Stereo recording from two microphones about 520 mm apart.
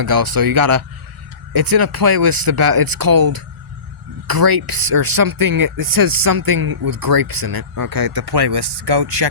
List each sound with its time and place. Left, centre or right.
0.0 s speech: right